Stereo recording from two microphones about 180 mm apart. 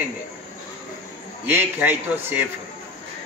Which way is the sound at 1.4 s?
10° right (ahead or behind).